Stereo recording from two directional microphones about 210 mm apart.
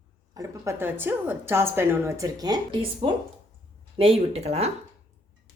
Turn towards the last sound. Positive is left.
turn(degrees=-30)  # may be behind; listen again after turning